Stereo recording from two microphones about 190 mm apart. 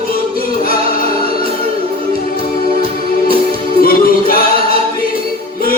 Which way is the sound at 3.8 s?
50° left (ahead or behind).